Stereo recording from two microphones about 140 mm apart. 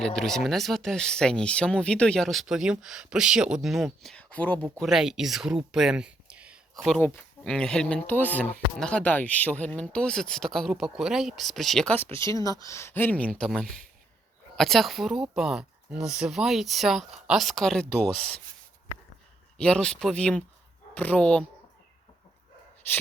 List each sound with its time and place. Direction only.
0.0 s speech: 5° left (ahead or behind)
4.8 s speech: 5° right (ahead or behind)
7.0 s speech: 15° left (ahead or behind)
12.1 s speech: 20° left (ahead or behind); by 18.3 s 5° left (ahead or behind)
19.5 s speech: 5° left (ahead or behind)